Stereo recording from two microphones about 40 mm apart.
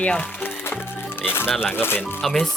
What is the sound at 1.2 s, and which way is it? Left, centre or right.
Speech, left.